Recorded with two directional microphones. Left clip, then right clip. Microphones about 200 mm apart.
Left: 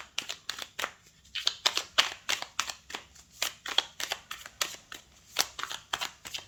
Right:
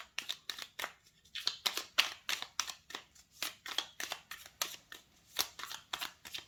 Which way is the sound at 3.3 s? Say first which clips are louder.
Left 9 dB; 10° left (ahead or behind).